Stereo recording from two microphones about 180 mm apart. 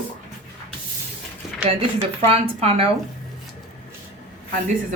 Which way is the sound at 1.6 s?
35° right (ahead or behind).